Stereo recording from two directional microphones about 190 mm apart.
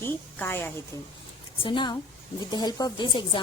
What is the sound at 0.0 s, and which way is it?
Speech, 10° left (ahead or behind).